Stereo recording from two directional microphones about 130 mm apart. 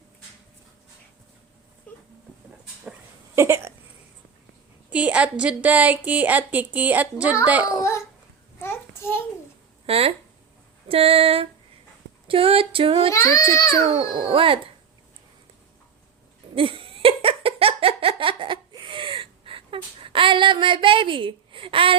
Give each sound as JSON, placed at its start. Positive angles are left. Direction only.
{"t": 1.9, "sound": "a sound", "side_deg": 10}
{"t": 3.3, "sound": "a sound", "side_deg": -20}
{"t": 4.9, "sound": "a woman's voice", "side_deg": -10}
{"t": 7.7, "sound": "a child's voice", "side_deg": 20}
{"t": 8.6, "sound": "child singing", "side_deg": 20}
{"t": 9.8, "sound": "speech", "side_deg": -50}
{"t": 13.1, "sound": "a child's voice", "side_deg": 25}
{"t": 13.8, "sound": "speech", "side_deg": -40}
{"t": 16.6, "sound": "giggle", "side_deg": -45}